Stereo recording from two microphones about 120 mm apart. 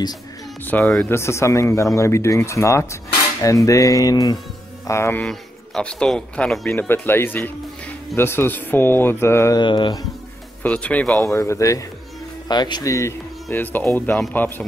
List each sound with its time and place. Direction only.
0.7 s speech: 10° left (ahead or behind)
1.1 s speech: 25° left (ahead or behind)
5.2 s speech: 5° left (ahead or behind)
6.7 s speech: 20° left (ahead or behind)
9.6 s speech: 40° left (ahead or behind)
10.6 s speech: 10° left (ahead or behind)
11.3 s speech: 25° left (ahead or behind)
12.4 s speech: 35° left (ahead or behind); by 14.2 s 15° left (ahead or behind)